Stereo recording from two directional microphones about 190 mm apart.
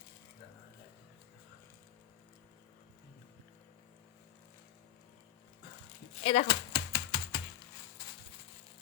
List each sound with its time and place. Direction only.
6.2 s typewriter: 30° left (ahead or behind)